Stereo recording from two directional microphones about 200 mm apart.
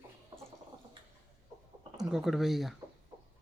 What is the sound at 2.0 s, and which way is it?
Speech, centre (ahead or behind).